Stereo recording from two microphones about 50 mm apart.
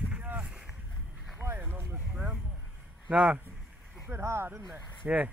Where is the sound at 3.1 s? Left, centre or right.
Right.